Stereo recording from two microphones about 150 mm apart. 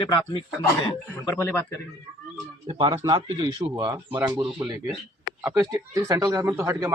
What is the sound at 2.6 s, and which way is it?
A man's voice, 40° right (ahead or behind).